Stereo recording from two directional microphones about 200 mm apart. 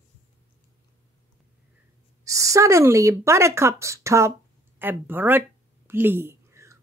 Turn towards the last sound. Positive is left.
turn(degrees=-15)  # may be behind; listen again after turning